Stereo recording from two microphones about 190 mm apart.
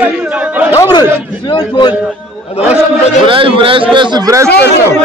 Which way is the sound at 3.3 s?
25° right (ahead or behind).